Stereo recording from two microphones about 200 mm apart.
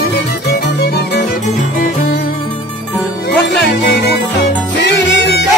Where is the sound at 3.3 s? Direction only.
55° left (ahead or behind).